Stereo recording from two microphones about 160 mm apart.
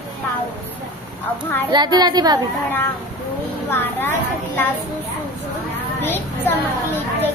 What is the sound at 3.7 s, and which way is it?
Speech, 15° left (ahead or behind).